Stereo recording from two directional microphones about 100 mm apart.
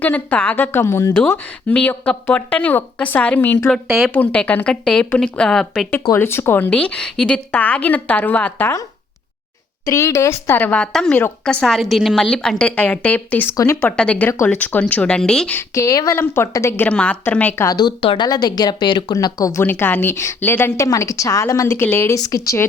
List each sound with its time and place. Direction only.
0.0 s speech: 15° left (ahead or behind)
1.7 s a woman's voice: 15° left (ahead or behind)
3.8 s speech: 5° right (ahead or behind)
4.1 s a woman's voice: 15° left (ahead or behind)
6.1 s speech: 25° left (ahead or behind)
6.7 s a woman's voice: 10° left (ahead or behind)
9.8 s speech: 30° left (ahead or behind); by 10.8 s 15° left (ahead or behind)
10.9 s a woman's voice: 5° left (ahead or behind)
15.5 s speech: 30° left (ahead or behind)
16.9 s a woman's voice: 10° left (ahead or behind)
17.7 s speech: 45° left (ahead or behind)
19.6 s speech: 20° left (ahead or behind)